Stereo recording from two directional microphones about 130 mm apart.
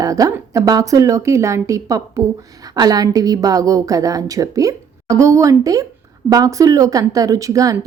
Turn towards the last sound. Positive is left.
turn(degrees=-25)  # may be behind; listen again after turning